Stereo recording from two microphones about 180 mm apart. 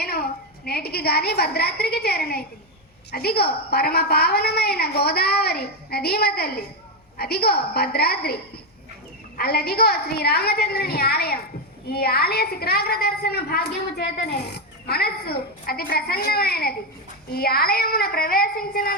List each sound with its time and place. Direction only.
0.0 s a woman's voice: 60° left (ahead or behind)
9.4 s a woman's voice: 60° left (ahead or behind)